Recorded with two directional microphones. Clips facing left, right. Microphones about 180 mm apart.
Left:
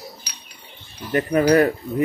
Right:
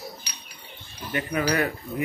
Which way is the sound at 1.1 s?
40° left (ahead or behind).